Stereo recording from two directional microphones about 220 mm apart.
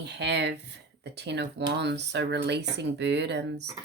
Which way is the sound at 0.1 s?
50° right (ahead or behind).